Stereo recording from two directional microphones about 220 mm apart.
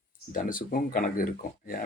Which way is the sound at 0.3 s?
40° left (ahead or behind).